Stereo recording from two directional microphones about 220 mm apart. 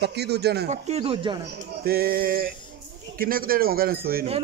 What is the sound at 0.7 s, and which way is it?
Speech, 30° right (ahead or behind).